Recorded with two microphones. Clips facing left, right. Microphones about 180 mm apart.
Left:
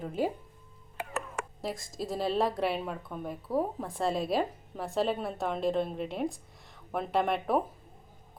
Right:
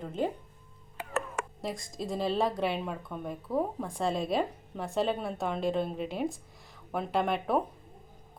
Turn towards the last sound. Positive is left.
turn(degrees=0)  # may be behind; listen again after turning